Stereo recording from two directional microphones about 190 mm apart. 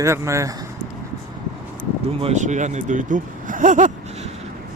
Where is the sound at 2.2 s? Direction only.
40° right (ahead or behind).